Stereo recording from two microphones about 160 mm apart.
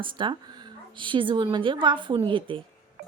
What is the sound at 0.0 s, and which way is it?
A woman's voice, 30° right (ahead or behind).